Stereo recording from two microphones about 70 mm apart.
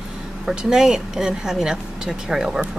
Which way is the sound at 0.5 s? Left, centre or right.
Centre.